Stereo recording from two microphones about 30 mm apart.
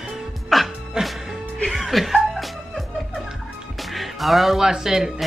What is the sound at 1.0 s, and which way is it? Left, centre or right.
Music, right.